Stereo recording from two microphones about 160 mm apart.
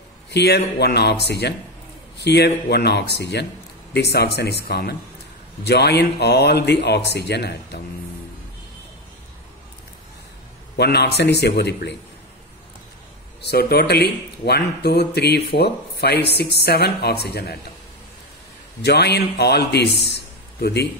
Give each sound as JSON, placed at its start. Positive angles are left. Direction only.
{"t": 0.3, "sound": "speech", "side_deg": 90}
{"t": 10.8, "sound": "speech", "side_deg": 90}
{"t": 13.4, "sound": "speech", "side_deg": 85}
{"t": 18.8, "sound": "speech", "side_deg": 90}
{"t": 20.1, "sound": "a sound", "side_deg": 90}